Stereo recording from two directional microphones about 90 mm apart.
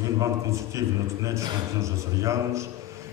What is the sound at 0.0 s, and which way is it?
A man's voice, 35° right (ahead or behind).